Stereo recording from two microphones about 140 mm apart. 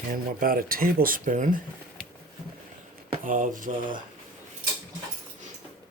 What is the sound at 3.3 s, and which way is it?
Speech, 70° right (ahead or behind).